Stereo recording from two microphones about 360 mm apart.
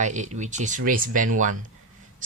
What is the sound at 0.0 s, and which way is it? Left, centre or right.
Speech, centre.